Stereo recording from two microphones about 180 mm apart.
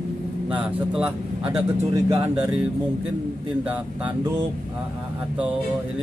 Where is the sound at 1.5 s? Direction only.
20° right (ahead or behind).